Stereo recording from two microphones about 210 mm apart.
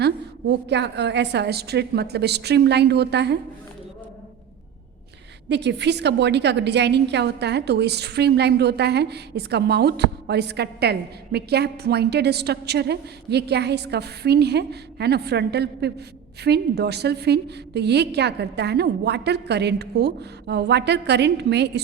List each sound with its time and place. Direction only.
0.0 s a woman's voice: 55° right (ahead or behind)
5.5 s a woman's voice: 55° right (ahead or behind)